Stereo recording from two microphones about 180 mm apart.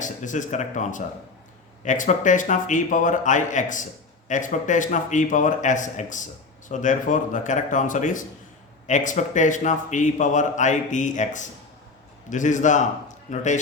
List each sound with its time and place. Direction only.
0.0 s a man's voice: 45° left (ahead or behind)